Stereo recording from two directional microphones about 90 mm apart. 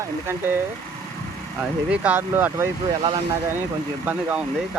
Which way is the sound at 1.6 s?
15° right (ahead or behind).